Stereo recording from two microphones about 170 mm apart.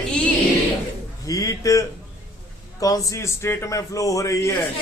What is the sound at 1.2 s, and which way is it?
A man's voice, 20° left (ahead or behind).